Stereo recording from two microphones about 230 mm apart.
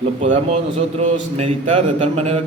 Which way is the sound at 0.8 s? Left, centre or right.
Right.